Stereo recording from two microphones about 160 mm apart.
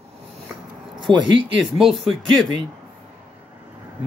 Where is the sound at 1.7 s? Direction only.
Centre (ahead or behind).